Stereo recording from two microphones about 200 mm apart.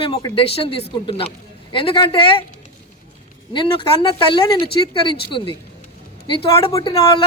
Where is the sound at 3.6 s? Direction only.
25° left (ahead or behind).